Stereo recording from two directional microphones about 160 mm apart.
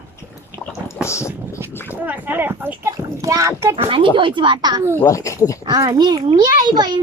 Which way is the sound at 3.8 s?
30° right (ahead or behind).